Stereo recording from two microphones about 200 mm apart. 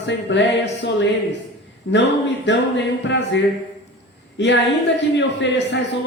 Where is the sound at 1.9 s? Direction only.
65° left (ahead or behind).